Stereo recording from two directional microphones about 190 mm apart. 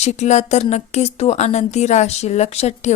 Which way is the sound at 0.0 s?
35° left (ahead or behind).